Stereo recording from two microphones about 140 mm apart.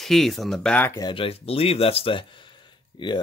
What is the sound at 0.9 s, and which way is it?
Speech, 35° left (ahead or behind).